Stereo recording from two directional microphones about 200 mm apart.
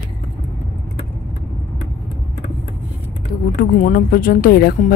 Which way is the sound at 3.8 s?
45° left (ahead or behind).